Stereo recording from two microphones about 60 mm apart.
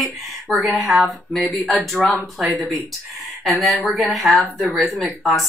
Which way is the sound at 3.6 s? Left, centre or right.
Centre.